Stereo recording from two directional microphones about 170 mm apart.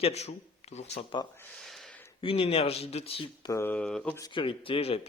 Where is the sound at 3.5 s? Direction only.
15° left (ahead or behind).